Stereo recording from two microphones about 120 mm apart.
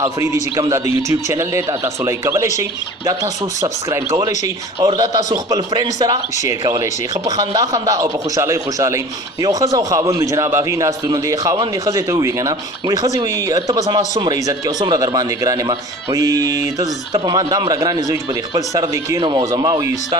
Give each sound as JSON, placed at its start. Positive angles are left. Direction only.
{"t": 0.0, "sound": "a man's voice", "side_deg": -25}
{"t": 2.0, "sound": "a man's voice", "side_deg": -25}
{"t": 3.6, "sound": "a man's voice", "side_deg": -30}